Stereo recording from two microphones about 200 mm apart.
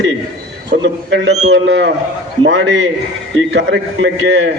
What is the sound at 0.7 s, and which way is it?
A man's voice, 60° right (ahead or behind).